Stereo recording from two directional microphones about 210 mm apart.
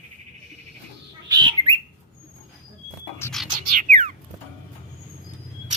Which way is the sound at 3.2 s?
10° left (ahead or behind).